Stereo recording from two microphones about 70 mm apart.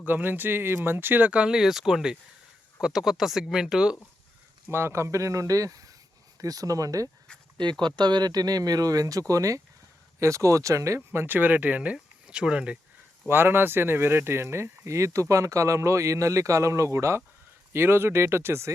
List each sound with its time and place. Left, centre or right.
0.0 s speech: right; by 3.9 s centre
4.7 s speech: right
7.6 s speech: right; by 12.8 s centre
13.2 s speech: right